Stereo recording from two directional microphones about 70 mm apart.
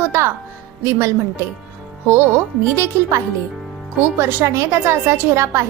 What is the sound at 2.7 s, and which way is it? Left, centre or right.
Speech, right.